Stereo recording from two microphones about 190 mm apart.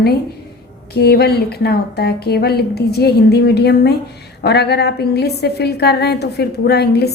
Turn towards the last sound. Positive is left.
turn(degrees=60)  # may be behind; listen again after turning